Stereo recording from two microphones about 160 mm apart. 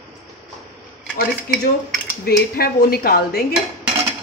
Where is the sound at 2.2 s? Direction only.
70° left (ahead or behind).